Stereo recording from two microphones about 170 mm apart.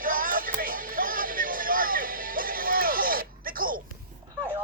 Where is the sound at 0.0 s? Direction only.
55° right (ahead or behind).